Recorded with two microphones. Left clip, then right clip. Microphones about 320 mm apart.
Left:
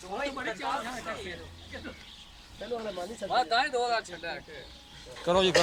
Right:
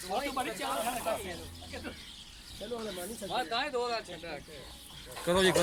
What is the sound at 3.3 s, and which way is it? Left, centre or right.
Speech, left.